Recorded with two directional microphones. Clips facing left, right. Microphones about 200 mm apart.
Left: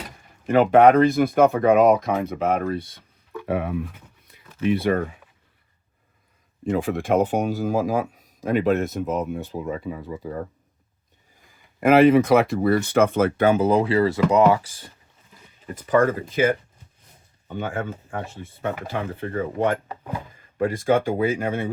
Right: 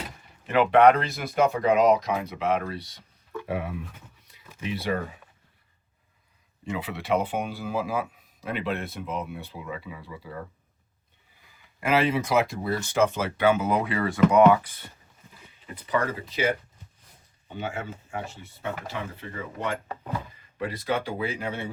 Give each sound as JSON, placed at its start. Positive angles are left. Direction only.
{"t": 0.4, "sound": "speech", "side_deg": 45}
{"t": 4.3, "sound": "a sound", "side_deg": 55}
{"t": 4.6, "sound": "speech", "side_deg": 55}
{"t": 6.7, "sound": "speech", "side_deg": 45}
{"t": 11.8, "sound": "speech", "side_deg": 55}
{"t": 15.6, "sound": "speech", "side_deg": 45}